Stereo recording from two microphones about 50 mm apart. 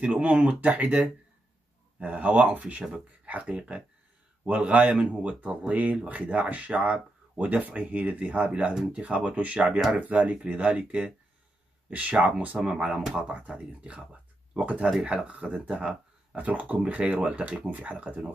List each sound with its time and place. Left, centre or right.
0.0 s speech: right
14.9 s speech: centre
15.2 s speech: right